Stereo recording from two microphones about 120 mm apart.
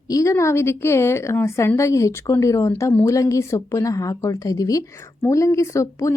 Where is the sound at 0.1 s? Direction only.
25° left (ahead or behind).